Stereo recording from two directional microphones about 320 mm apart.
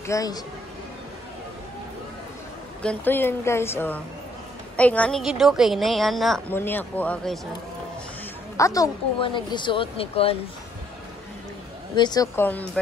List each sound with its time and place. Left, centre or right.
0.0 s speech: centre
2.8 s a woman's voice: centre
8.5 s speech: centre
11.9 s speech: centre